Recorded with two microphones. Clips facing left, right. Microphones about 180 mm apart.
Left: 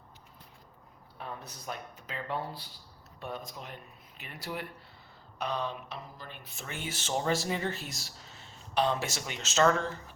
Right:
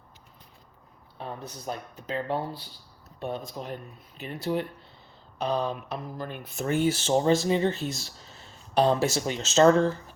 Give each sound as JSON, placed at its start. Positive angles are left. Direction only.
{"t": 1.2, "sound": "speech", "side_deg": -30}
{"t": 5.7, "sound": "speech", "side_deg": -50}